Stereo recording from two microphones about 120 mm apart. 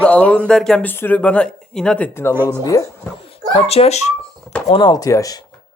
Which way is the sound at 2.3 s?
15° right (ahead or behind).